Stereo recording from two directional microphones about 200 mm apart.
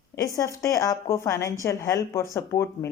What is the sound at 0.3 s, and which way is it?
Speech, 15° left (ahead or behind).